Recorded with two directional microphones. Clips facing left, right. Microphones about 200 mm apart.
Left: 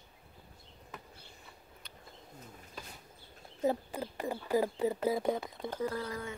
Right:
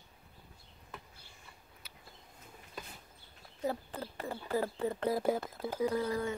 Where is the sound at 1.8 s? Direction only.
5° right (ahead or behind).